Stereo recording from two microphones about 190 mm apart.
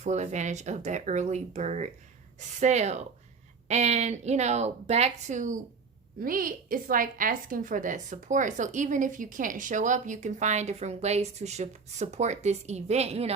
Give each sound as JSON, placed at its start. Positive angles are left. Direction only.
{"t": 0.0, "sound": "a woman's voice", "side_deg": -35}